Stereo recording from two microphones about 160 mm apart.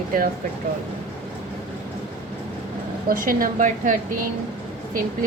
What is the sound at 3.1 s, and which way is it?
Speech, 60° right (ahead or behind).